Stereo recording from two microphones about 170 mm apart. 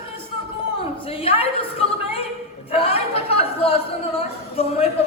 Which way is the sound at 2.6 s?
35° left (ahead or behind).